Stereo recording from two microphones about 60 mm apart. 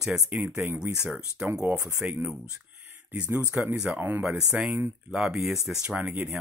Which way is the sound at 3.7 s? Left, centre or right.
Centre.